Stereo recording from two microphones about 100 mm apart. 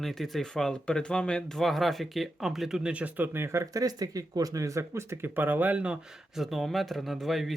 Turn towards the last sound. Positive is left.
turn(degrees=0)  # may be behind; listen again after turning